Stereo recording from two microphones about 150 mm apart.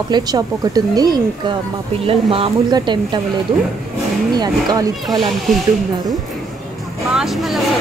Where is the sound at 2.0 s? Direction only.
40° right (ahead or behind).